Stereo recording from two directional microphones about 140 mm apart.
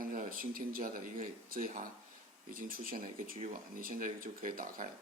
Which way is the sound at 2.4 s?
85° right.